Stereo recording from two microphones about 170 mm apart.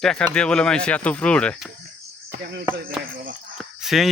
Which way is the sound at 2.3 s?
65° right (ahead or behind).